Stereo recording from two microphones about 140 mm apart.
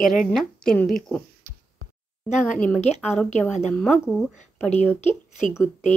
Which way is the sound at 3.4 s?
5° left (ahead or behind).